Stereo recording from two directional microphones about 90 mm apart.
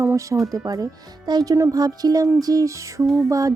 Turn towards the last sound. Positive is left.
turn(degrees=-40)  # may be behind; listen again after turning